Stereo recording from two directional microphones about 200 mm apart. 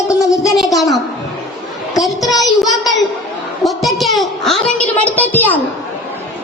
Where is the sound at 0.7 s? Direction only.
Centre (ahead or behind).